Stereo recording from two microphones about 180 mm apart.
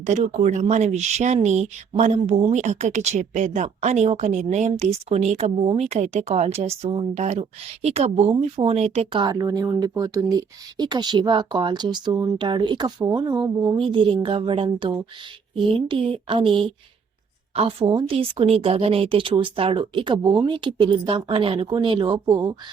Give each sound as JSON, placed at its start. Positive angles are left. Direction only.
{"t": 0.0, "sound": "speech", "side_deg": -40}
{"t": 9.2, "sound": "speech", "side_deg": -20}